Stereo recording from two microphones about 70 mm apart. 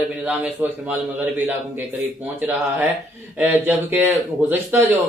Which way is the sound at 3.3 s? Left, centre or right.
Right.